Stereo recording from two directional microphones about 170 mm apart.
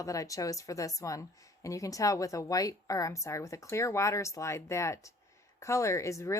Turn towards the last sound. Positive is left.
turn(degrees=15)  # may be behind; listen again after turning